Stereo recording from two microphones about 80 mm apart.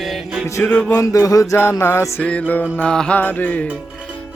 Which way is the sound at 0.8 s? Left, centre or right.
Left.